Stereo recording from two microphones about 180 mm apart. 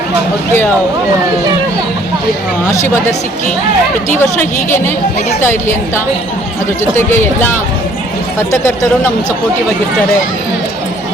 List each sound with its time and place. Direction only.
2.6 s speech: 15° left (ahead or behind)
6.9 s speech: 10° left (ahead or behind)